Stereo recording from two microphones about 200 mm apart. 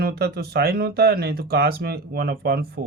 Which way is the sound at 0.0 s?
50° right (ahead or behind).